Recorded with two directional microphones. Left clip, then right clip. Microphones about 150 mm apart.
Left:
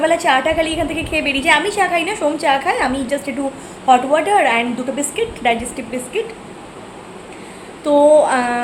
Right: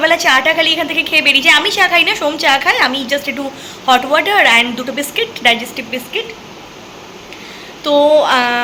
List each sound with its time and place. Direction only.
0.0 s a woman's voice: 10° left (ahead or behind)
7.9 s speech: 20° right (ahead or behind)
8.2 s a woman's voice: 10° left (ahead or behind)